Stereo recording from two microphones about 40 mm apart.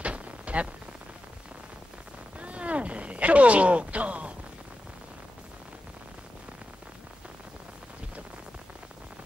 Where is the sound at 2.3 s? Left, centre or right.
Right.